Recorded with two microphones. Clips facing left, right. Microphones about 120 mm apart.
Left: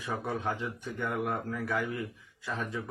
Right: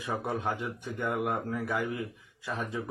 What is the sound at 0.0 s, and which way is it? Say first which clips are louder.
Speech: right 1 dB; 15° right (ahead or behind).